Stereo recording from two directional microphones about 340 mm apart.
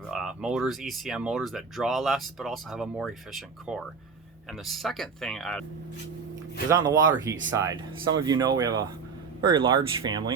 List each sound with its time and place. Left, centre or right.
0.1 s speech: centre
6.7 s speech: centre